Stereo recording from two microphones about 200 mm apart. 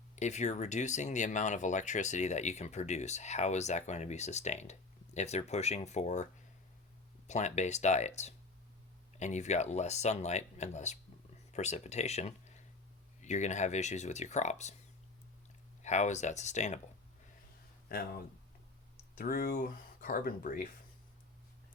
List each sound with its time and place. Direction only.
0.2 s speech: 35° left (ahead or behind)
7.3 s speech: 35° left (ahead or behind)
15.8 s speech: 35° left (ahead or behind)
19.1 s speech: 45° left (ahead or behind)